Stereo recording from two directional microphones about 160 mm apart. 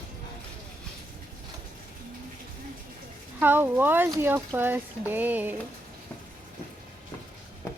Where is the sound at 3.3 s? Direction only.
10° right (ahead or behind).